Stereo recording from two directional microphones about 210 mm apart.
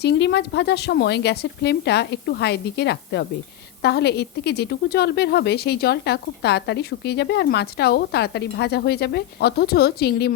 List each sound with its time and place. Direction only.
0.0 s a woman's voice: 55° left (ahead or behind)